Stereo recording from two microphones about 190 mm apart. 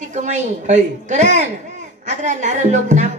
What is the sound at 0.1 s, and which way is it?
A man's voice, 40° right (ahead or behind).